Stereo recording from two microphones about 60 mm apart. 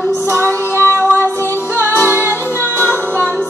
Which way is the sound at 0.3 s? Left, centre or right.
Right.